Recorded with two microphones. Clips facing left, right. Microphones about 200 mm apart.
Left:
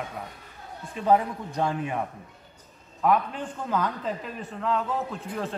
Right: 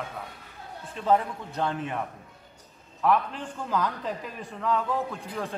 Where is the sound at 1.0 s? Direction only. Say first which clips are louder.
Left 2 dB; 10° left (ahead or behind).